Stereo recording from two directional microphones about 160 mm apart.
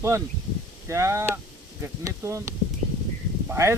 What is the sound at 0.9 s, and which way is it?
Speech, 15° right (ahead or behind).